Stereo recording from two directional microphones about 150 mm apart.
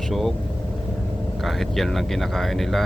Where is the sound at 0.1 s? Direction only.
Centre (ahead or behind).